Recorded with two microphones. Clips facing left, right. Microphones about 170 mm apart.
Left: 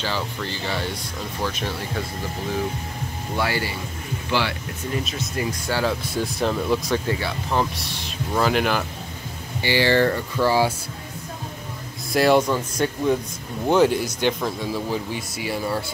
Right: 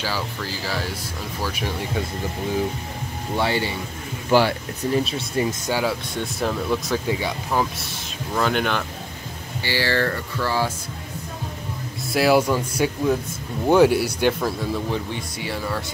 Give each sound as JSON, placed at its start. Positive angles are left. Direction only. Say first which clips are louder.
{"t": 0.0, "sound": "speech", "louder": "even", "side_deg": -5}
{"t": 3.3, "sound": "speech", "louder": "right 2 dB", "side_deg": -25}
{"t": 4.3, "sound": "speech", "louder": "right 7 dB", "side_deg": -45}
{"t": 4.9, "sound": "speech", "louder": "right 5 dB", "side_deg": -30}
{"t": 5.7, "sound": "speech", "louder": "left 4 dB", "side_deg": -10}
{"t": 6.1, "sound": "speech", "louder": "left 2 dB", "side_deg": 0}
{"t": 7.1, "sound": "speech", "louder": "right 1 dB", "side_deg": -15}
{"t": 7.7, "sound": "speech", "louder": "left 1 dB", "side_deg": 0}
{"t": 9.6, "sound": "speech", "louder": "left 4 dB", "side_deg": 20}
{"t": 12.1, "sound": "speech", "louder": "even", "side_deg": -5}
{"t": 14.7, "sound": "speech", "louder": "even", "side_deg": 5}